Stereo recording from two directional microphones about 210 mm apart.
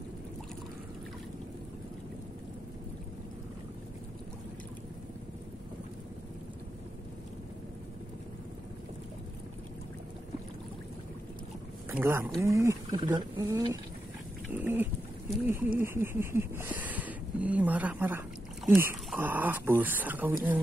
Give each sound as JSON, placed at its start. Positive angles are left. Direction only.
{"t": 11.9, "sound": "speech", "side_deg": -10}